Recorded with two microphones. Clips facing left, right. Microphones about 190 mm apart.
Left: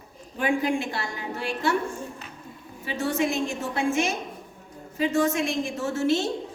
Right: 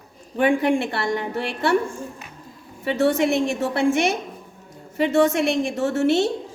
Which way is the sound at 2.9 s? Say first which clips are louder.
Right 7 dB; 70° right (ahead or behind).